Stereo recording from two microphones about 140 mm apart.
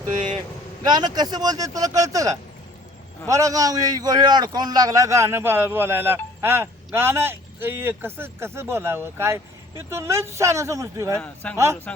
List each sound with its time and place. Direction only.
0.9 s a man's voice: 30° right (ahead or behind)